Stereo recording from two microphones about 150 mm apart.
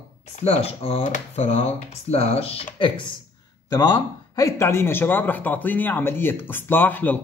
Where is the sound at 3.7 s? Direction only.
25° left (ahead or behind).